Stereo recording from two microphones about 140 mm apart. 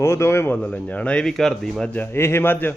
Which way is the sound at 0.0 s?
20° left (ahead or behind).